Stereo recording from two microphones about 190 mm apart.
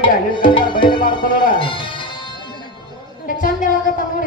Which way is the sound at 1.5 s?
25° left (ahead or behind).